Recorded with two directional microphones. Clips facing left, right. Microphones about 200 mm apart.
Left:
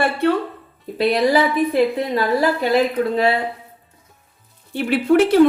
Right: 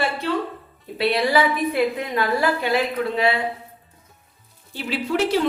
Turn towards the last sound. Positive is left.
turn(degrees=55)  # may be behind; listen again after turning